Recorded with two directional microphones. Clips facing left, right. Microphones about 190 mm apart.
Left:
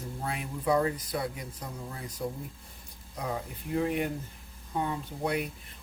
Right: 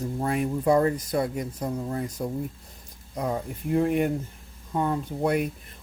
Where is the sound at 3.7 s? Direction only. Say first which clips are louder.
Right 6 dB; 50° right (ahead or behind).